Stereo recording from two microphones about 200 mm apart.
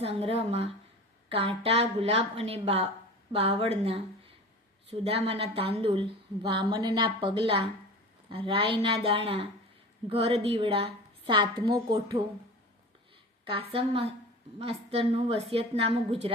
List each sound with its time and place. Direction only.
0.0 s a woman's voice: 30° right (ahead or behind)
13.4 s a woman's voice: 25° right (ahead or behind)